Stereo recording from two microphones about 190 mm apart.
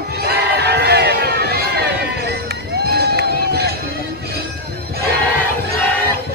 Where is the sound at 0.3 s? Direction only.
60° right (ahead or behind).